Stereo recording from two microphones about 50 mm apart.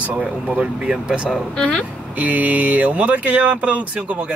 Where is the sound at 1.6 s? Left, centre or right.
Left.